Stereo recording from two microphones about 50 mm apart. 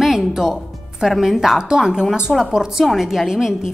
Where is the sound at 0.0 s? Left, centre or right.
Centre.